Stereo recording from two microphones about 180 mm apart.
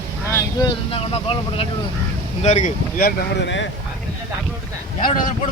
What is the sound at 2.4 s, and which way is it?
Speech, 40° left (ahead or behind).